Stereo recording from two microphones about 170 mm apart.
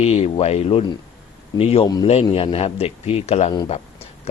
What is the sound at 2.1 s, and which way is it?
A man's voice, 35° left (ahead or behind).